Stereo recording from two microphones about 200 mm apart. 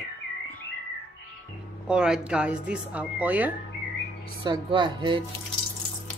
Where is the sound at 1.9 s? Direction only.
5° right (ahead or behind).